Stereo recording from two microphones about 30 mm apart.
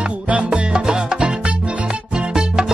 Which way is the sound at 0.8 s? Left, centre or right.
Right.